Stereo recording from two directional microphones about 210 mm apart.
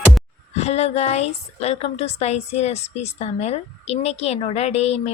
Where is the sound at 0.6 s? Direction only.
30° left (ahead or behind).